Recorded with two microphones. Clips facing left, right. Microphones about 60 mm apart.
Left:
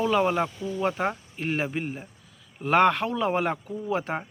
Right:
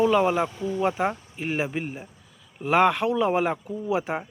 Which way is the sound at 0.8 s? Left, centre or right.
Centre.